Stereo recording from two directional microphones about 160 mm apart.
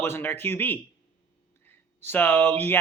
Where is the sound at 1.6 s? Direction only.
10° left (ahead or behind).